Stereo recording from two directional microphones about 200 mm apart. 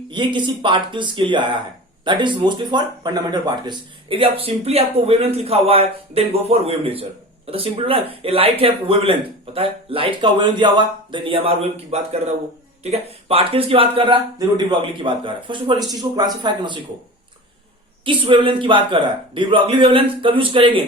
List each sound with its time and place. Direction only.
0.1 s speech: 25° right (ahead or behind)
18.0 s speech: 25° right (ahead or behind)